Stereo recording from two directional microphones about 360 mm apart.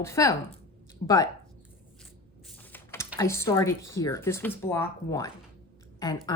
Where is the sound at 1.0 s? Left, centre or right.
Left.